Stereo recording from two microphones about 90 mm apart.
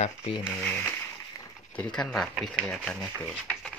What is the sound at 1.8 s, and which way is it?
Speech, 10° left (ahead or behind).